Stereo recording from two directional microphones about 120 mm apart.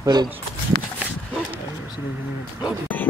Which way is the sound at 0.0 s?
35° right (ahead or behind).